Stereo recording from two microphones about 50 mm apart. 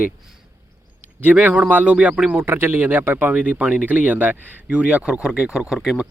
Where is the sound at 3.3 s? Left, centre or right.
Right.